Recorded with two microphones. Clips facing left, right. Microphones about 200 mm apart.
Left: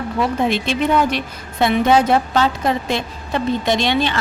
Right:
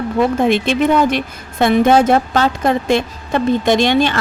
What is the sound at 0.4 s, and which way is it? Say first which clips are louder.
A woman's voice: right 4 dB; 55° right (ahead or behind).